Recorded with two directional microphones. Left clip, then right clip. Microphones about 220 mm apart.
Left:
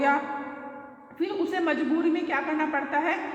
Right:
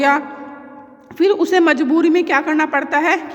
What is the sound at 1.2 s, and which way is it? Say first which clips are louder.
A woman's voice: right 14 dB; 50° right (ahead or behind).